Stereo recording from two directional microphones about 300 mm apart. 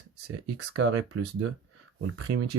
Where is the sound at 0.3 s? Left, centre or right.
Right.